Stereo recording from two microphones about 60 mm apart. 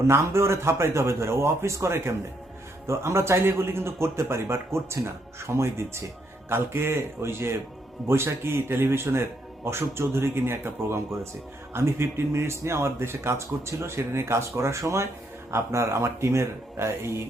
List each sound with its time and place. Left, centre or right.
0.1 s speech: right